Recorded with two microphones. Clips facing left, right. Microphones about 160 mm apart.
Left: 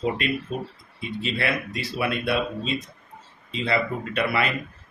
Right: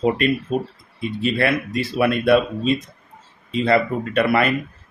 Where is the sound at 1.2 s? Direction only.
50° right (ahead or behind).